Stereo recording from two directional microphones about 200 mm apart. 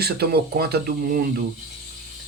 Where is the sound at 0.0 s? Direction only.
50° right (ahead or behind).